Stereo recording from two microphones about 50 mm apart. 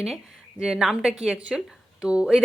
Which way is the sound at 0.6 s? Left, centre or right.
Centre.